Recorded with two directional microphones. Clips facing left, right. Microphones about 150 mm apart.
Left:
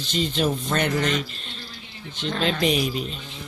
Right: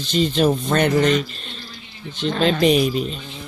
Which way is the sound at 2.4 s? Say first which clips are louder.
Right 6 dB; 40° right (ahead or behind).